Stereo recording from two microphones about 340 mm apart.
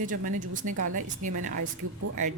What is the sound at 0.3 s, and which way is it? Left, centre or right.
Speech, right.